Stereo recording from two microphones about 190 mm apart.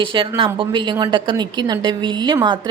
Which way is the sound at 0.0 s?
25° right (ahead or behind).